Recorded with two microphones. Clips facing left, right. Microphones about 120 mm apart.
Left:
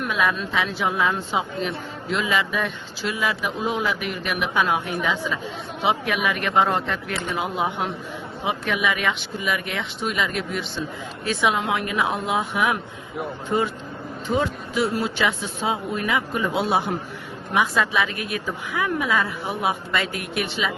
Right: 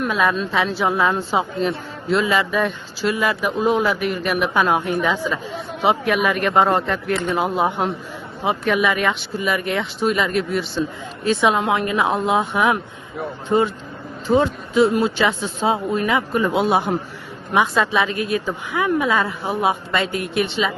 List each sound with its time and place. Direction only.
0.0 s a woman's voice: 35° right (ahead or behind)
11.3 s speech: 30° right (ahead or behind)
16.3 s speech: 45° right (ahead or behind)
17.5 s speech: 30° right (ahead or behind)